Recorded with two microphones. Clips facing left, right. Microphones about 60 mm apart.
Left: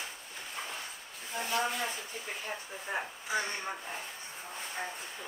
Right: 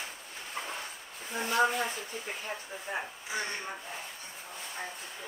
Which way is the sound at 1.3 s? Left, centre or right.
Right.